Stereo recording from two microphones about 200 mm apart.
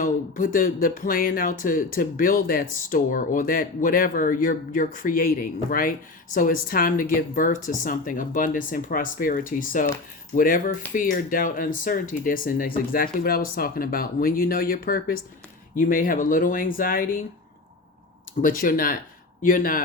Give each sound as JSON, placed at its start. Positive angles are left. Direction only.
{"t": 0.0, "sound": "speech", "side_deg": 45}
{"t": 18.4, "sound": "speech", "side_deg": 45}